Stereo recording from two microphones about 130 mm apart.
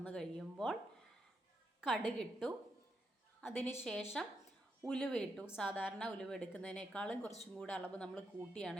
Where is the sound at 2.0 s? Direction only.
5° left (ahead or behind).